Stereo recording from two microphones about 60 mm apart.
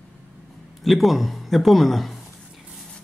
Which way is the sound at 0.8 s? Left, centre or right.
Centre.